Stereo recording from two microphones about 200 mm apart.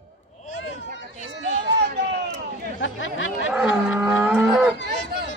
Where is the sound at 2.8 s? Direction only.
70° left (ahead or behind).